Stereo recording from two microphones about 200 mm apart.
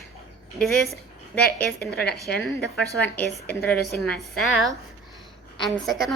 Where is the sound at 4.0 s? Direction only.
Centre (ahead or behind).